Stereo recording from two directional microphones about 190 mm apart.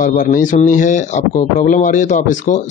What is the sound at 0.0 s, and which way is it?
Speech, 45° left (ahead or behind).